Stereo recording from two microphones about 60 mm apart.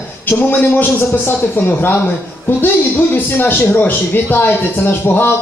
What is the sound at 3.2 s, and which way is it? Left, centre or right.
A woman's voice, left.